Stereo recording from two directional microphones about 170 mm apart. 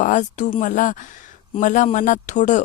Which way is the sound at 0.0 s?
45° left (ahead or behind).